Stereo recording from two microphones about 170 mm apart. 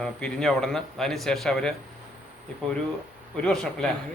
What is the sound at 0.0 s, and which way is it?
A man's voice, 5° left (ahead or behind).